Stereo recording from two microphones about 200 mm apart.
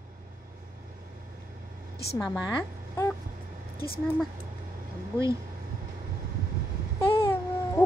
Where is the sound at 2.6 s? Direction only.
15° left (ahead or behind).